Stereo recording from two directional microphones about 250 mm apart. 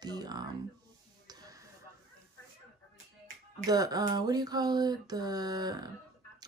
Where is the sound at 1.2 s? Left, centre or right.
Centre.